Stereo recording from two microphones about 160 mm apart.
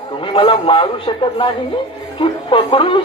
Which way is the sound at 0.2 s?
35° left (ahead or behind).